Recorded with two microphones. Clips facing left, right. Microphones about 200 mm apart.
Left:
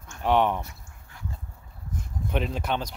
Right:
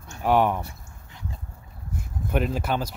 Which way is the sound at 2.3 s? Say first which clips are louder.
Right 3 dB; 5° right (ahead or behind).